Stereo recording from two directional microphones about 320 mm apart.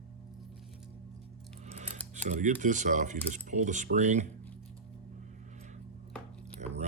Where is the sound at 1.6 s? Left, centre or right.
Centre.